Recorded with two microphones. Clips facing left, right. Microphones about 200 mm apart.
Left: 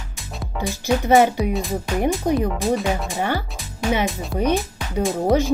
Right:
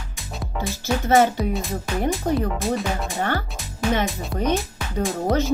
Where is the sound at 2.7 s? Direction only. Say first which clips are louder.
Left 3 dB; centre (ahead or behind).